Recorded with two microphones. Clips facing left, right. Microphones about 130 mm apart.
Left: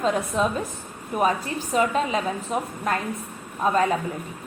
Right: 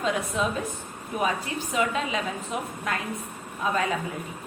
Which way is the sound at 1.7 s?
40° left (ahead or behind).